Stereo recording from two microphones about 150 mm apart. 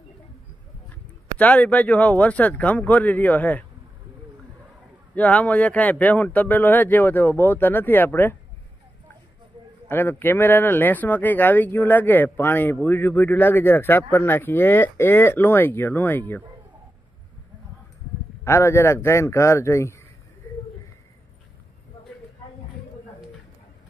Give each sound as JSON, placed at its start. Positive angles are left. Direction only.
{"t": 1.4, "sound": "speech", "side_deg": 10}
{"t": 5.1, "sound": "speech", "side_deg": 10}
{"t": 9.8, "sound": "speech", "side_deg": 15}
{"t": 18.4, "sound": "speech", "side_deg": 20}